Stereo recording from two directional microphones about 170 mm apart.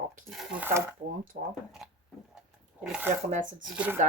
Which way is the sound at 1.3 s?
65° right (ahead or behind).